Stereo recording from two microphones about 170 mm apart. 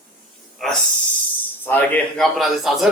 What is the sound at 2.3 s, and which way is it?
Speech, centre (ahead or behind).